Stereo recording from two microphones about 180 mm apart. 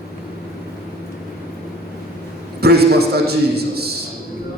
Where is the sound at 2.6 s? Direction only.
60° right (ahead or behind).